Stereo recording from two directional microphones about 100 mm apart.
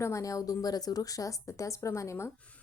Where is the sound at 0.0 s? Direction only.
30° left (ahead or behind).